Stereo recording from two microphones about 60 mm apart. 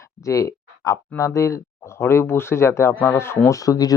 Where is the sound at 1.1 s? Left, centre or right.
Left.